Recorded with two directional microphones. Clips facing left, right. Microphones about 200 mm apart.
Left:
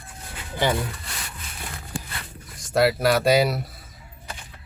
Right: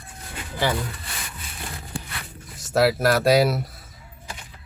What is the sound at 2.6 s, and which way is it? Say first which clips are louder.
Speech: even; centre (ahead or behind).